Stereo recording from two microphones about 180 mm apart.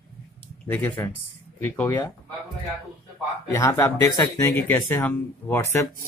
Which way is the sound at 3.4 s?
15° left (ahead or behind).